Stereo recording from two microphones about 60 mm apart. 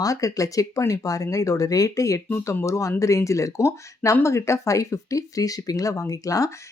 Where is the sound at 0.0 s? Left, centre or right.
Left.